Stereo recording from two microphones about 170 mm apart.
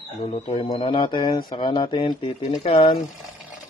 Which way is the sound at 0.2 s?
35° left (ahead or behind).